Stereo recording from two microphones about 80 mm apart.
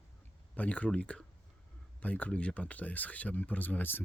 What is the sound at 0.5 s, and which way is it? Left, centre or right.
Speech, centre.